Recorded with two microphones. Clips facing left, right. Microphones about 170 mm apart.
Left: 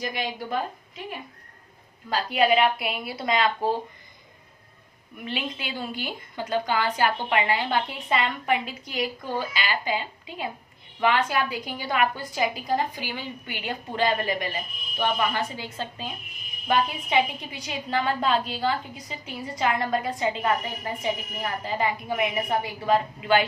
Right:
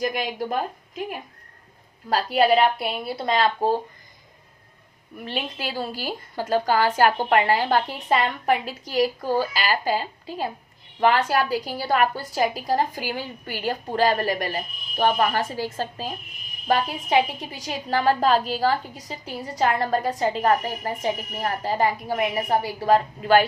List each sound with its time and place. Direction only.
0.0 s a woman's voice: 45° right (ahead or behind)
5.2 s a woman's voice: 40° right (ahead or behind)